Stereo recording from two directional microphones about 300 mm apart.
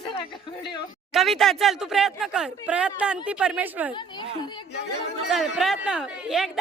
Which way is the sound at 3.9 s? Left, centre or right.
Centre.